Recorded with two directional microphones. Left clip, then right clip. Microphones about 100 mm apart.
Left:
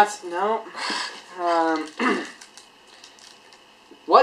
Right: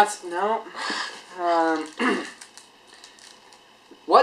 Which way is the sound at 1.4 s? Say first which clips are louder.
Even; 5° left (ahead or behind).